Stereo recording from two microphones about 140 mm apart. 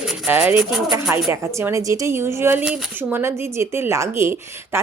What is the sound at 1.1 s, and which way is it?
A woman's voice, 20° right (ahead or behind).